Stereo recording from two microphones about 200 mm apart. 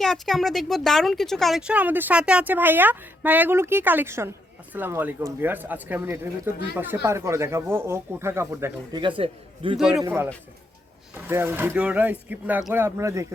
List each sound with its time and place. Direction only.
0.0 s speech: centre (ahead or behind)
9.0 s a man's voice: 25° right (ahead or behind)
9.7 s speech: 5° right (ahead or behind)
11.3 s speech: 10° right (ahead or behind)